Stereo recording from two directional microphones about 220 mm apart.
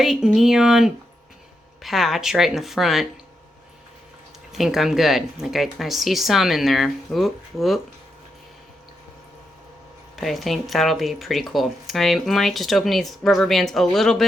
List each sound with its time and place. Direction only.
0.0 s speech: centre (ahead or behind)
4.5 s speech: centre (ahead or behind)
10.2 s speech: centre (ahead or behind)